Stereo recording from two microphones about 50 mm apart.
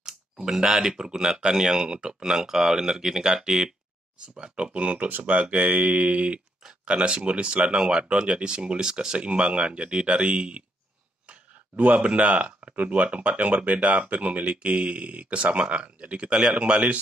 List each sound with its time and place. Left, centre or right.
0.0 s speech: centre
4.7 s speech: right